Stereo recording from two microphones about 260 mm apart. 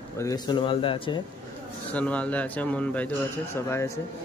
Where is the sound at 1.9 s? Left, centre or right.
Centre.